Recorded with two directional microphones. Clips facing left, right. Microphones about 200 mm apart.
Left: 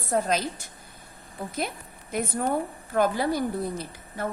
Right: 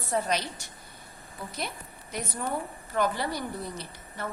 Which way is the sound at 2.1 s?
55° left (ahead or behind).